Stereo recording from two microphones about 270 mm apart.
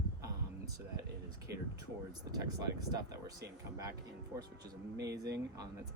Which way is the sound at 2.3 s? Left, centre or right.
Centre.